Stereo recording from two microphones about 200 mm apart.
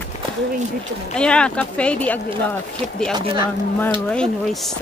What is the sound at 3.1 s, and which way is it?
Speech, 25° right (ahead or behind).